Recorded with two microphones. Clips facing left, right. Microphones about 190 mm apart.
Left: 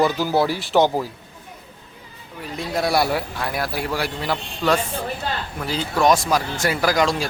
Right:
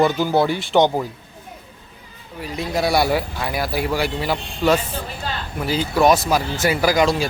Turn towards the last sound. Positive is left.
turn(degrees=0)  # may be behind; listen again after turning